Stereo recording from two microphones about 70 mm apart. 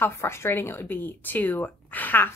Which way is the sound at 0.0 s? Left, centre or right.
Left.